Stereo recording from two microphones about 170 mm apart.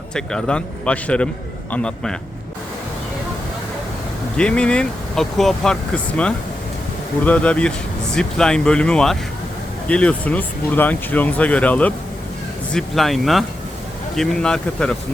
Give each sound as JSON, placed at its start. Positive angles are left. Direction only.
{"t": 0.1, "sound": "speech", "side_deg": 5}
{"t": 4.4, "sound": "speech", "side_deg": 5}